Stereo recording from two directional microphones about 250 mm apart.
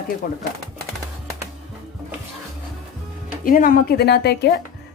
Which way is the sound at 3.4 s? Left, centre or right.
Left.